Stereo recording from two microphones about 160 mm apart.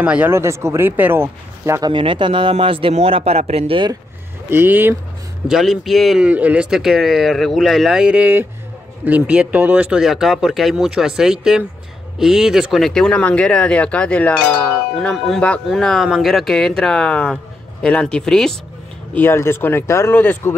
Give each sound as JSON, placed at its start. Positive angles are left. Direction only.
{"t": 0.0, "sound": "speech", "side_deg": -10}
{"t": 1.9, "sound": "a man's voice", "side_deg": -30}
{"t": 4.5, "sound": "speech", "side_deg": -15}
{"t": 5.5, "sound": "speech", "side_deg": 0}
{"t": 19.1, "sound": "speech", "side_deg": 15}